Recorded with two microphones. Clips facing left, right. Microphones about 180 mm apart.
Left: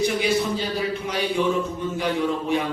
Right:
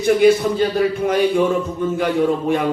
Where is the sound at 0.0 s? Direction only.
50° right (ahead or behind).